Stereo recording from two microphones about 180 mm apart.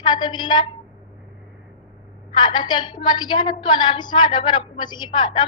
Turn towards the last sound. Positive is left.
turn(degrees=25)  # may be behind; listen again after turning